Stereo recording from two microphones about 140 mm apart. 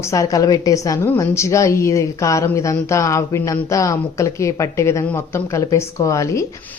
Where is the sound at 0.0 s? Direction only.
20° left (ahead or behind).